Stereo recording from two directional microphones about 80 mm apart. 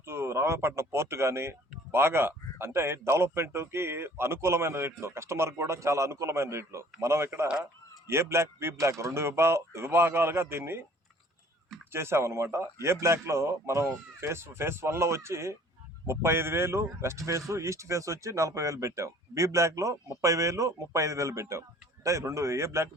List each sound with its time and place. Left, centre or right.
0.0 s speech: right
11.9 s speech: right